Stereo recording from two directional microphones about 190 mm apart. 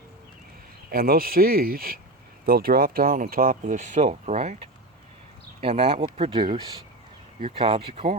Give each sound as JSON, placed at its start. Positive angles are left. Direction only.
{"t": 0.9, "sound": "speech", "side_deg": -50}
{"t": 7.6, "sound": "speech", "side_deg": -30}